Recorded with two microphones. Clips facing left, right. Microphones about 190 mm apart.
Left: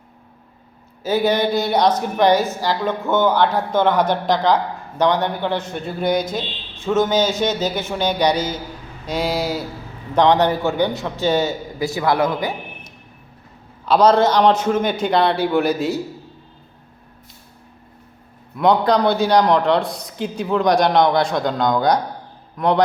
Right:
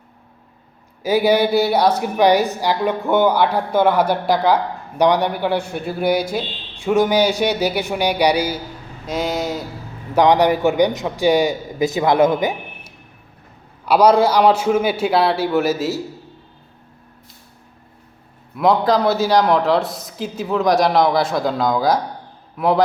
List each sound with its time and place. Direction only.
1.0 s a woman's voice: 10° right (ahead or behind)
9.0 s a man's voice: centre (ahead or behind)
10.2 s a woman's voice: 10° right (ahead or behind)
13.8 s a woman's voice: 10° right (ahead or behind)
18.5 s a man's voice: centre (ahead or behind)